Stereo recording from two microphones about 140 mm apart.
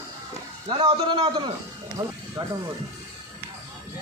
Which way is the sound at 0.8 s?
35° right (ahead or behind).